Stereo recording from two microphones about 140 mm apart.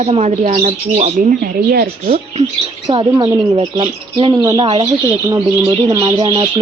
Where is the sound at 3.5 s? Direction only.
40° right (ahead or behind).